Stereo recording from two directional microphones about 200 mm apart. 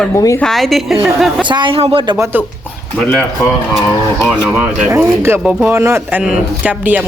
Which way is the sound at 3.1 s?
10° left (ahead or behind).